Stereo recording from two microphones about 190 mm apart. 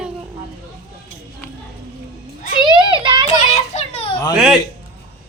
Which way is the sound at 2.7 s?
25° right (ahead or behind).